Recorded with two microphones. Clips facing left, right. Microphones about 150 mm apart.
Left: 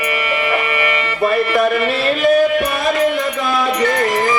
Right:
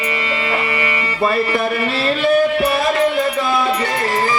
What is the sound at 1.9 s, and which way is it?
Music, 30° right (ahead or behind).